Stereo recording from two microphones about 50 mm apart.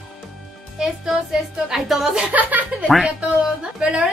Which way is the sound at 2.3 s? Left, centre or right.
Right.